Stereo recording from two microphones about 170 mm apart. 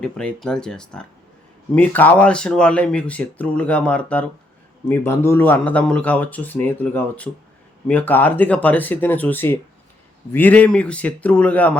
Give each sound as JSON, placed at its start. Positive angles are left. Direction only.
{"t": 0.0, "sound": "speech", "side_deg": 5}